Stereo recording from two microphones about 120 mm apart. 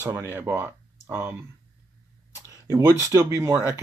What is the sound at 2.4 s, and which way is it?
Speech, 25° right (ahead or behind).